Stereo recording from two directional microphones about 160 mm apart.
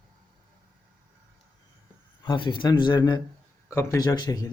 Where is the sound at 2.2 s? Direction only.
30° left (ahead or behind).